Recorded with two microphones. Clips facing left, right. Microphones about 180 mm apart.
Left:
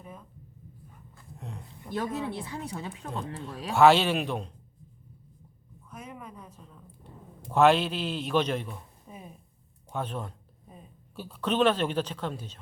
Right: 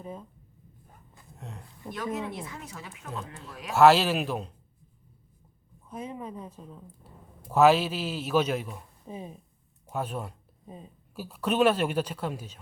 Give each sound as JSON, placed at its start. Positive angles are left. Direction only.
{"t": 0.0, "sound": "speech", "side_deg": -30}
{"t": 1.4, "sound": "a sound", "side_deg": 0}
{"t": 1.9, "sound": "speech", "side_deg": 30}
{"t": 3.8, "sound": "speech", "side_deg": 0}
{"t": 5.9, "sound": "a man's voice", "side_deg": -30}
{"t": 7.0, "sound": "speech", "side_deg": -5}
{"t": 9.0, "sound": "speech", "side_deg": -30}
{"t": 9.9, "sound": "speech", "side_deg": -10}